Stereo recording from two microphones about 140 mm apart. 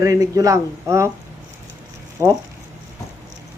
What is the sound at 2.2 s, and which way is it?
Speech, 20° right (ahead or behind).